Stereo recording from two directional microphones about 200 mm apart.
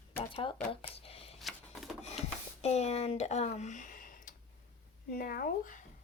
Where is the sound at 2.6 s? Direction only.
35° left (ahead or behind).